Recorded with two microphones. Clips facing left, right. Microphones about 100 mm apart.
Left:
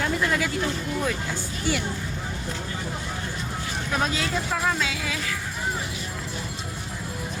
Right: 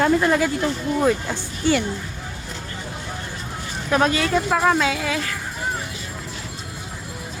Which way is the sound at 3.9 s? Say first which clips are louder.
Right 8 dB; 60° right (ahead or behind).